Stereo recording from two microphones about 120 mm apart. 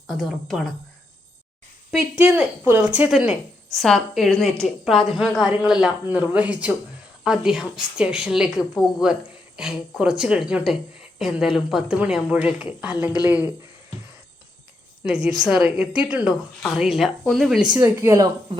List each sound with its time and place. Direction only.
0.1 s a woman's voice: centre (ahead or behind)
2.1 s a woman's voice: 20° right (ahead or behind)
15.0 s a woman's voice: 5° right (ahead or behind)
17.7 s speech: 20° right (ahead or behind)